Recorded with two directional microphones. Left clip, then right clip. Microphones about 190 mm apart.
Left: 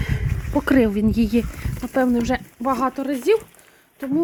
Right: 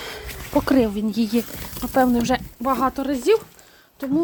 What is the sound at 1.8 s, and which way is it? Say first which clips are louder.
Speech: right 1 dB; 10° left (ahead or behind).